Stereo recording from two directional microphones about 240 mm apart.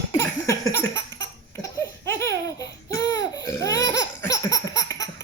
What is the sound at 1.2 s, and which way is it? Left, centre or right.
Laughter, centre.